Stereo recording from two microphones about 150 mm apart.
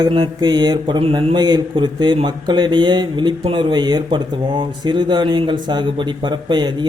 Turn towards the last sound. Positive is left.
turn(degrees=-30)  # may be behind; listen again after turning